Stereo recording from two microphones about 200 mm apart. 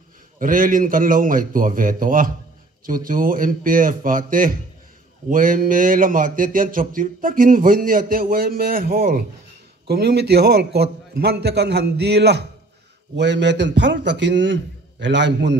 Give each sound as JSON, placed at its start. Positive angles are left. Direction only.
{"t": 0.4, "sound": "a man's voice", "side_deg": -45}